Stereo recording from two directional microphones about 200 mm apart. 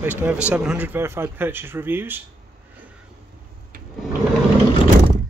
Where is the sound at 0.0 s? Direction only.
10° right (ahead or behind).